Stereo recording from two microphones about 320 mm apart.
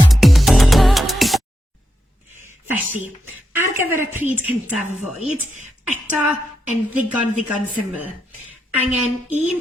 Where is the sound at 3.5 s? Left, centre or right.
Centre.